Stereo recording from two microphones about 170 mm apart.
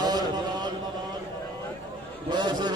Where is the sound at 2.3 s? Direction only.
25° right (ahead or behind).